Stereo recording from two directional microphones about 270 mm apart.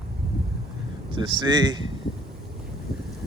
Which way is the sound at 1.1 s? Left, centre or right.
Centre.